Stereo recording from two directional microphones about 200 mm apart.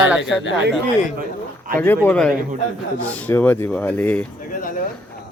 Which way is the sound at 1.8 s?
10° left (ahead or behind).